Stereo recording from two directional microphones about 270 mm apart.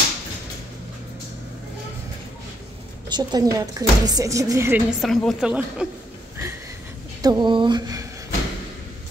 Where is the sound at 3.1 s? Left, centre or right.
Centre.